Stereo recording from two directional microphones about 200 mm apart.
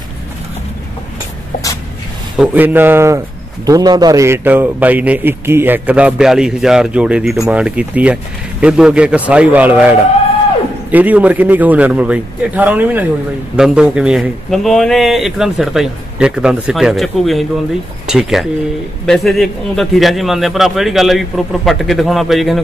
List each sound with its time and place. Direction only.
2.3 s a man's voice: 10° right (ahead or behind)